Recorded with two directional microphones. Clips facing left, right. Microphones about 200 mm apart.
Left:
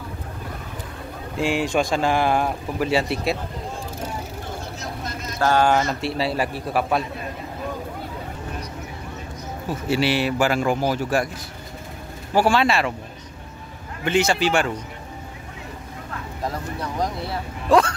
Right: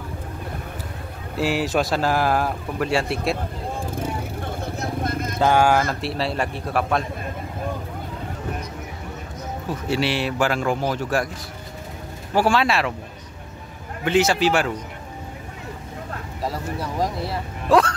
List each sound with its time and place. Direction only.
1.3 s speech: 5° right (ahead or behind)
4.0 s vehicle: 55° right (ahead or behind)
5.4 s speech: 10° right (ahead or behind); by 7.1 s 5° left (ahead or behind)
9.8 s speech: centre (ahead or behind)
12.4 s speech: centre (ahead or behind)
14.0 s speech: centre (ahead or behind)
16.4 s speech: 5° right (ahead or behind)